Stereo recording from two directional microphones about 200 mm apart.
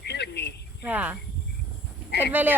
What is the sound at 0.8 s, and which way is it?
Speech, 10° right (ahead or behind).